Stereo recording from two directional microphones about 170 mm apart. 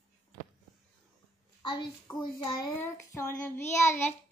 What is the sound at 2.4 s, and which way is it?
Child singing, 20° left (ahead or behind).